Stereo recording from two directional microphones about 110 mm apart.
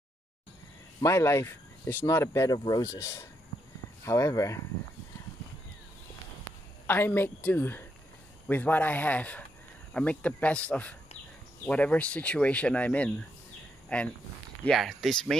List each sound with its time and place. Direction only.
1.0 s speech: 25° left (ahead or behind)
6.9 s speech: 20° left (ahead or behind); by 15.3 s 5° left (ahead or behind)